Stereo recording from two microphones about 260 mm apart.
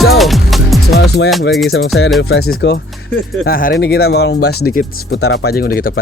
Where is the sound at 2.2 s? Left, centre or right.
Left.